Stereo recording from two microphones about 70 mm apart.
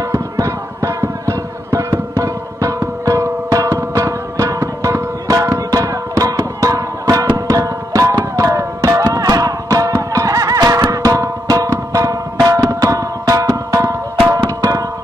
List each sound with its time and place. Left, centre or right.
0.1 s music: right
14.4 s music: right